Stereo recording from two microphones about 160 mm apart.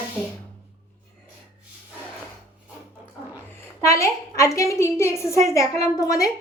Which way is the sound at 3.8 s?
20° left (ahead or behind).